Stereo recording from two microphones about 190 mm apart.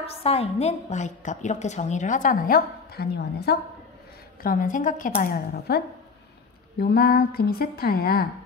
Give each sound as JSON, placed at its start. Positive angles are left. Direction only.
{"t": 0.0, "sound": "a woman's voice", "side_deg": 30}
{"t": 4.4, "sound": "a woman's voice", "side_deg": 45}
{"t": 6.8, "sound": "a woman's voice", "side_deg": 55}